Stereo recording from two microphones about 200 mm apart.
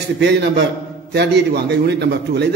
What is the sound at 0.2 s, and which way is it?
A man's voice, 60° right (ahead or behind).